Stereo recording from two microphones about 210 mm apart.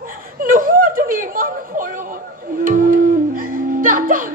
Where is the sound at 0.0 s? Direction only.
40° right (ahead or behind).